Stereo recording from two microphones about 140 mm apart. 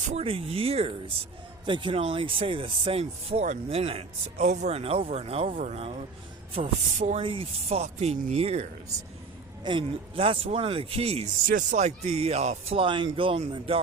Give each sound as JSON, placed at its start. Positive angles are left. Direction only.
{"t": 0.1, "sound": "speech", "side_deg": -45}
{"t": 5.5, "sound": "speech", "side_deg": -75}
{"t": 5.7, "sound": "speech", "side_deg": -45}
{"t": 9.6, "sound": "speech", "side_deg": -40}
{"t": 11.4, "sound": "speech", "side_deg": -65}